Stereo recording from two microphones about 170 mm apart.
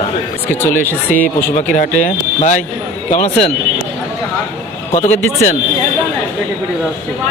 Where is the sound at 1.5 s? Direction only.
45° left (ahead or behind).